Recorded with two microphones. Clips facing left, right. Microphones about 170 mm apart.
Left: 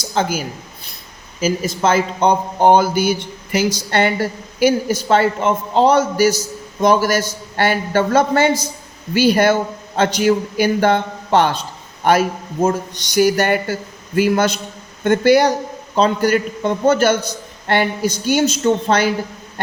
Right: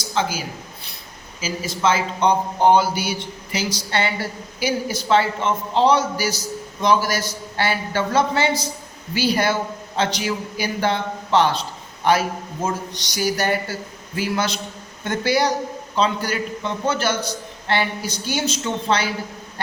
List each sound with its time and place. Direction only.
0.1 s a man's voice: 50° left (ahead or behind)
12.6 s a man's voice: 50° left (ahead or behind)